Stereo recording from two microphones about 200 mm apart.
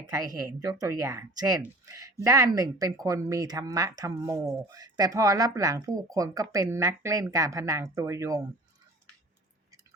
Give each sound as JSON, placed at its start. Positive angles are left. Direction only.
{"t": 0.1, "sound": "speech", "side_deg": -20}